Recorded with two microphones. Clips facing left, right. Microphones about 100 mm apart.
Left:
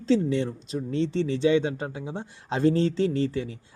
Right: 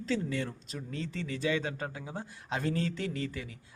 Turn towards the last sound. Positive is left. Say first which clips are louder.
# left 10 dB
turn(degrees=30)  # may be behind; listen again after turning